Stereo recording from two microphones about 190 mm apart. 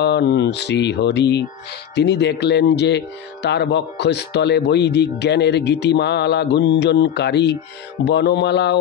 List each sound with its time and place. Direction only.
0.0 s speech: 60° left (ahead or behind)